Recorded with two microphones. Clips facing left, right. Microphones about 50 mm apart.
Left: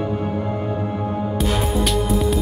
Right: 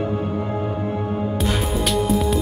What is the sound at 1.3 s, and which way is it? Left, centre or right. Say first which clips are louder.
Music: left 4 dB; centre.